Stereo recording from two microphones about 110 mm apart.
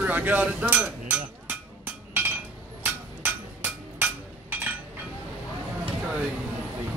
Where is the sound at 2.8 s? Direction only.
15° right (ahead or behind).